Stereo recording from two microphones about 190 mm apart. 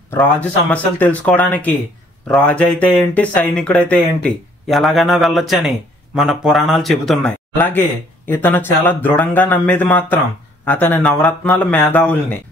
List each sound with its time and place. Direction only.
0.1 s speech: 10° left (ahead or behind)